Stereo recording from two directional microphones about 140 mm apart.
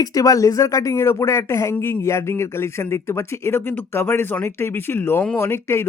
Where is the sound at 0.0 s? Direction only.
25° left (ahead or behind).